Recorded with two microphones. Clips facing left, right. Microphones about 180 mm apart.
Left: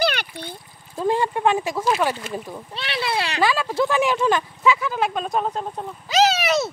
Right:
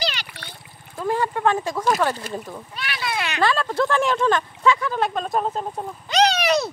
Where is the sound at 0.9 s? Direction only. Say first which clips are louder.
Left 2 dB; 20° left (ahead or behind).